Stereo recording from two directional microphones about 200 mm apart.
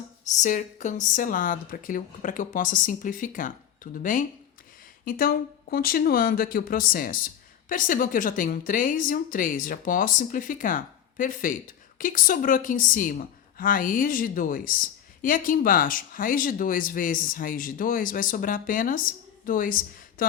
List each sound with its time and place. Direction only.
0.3 s a woman's voice: 40° left (ahead or behind)